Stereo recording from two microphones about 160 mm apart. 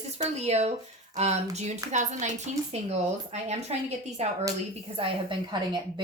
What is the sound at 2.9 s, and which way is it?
A woman's voice, 45° right (ahead or behind).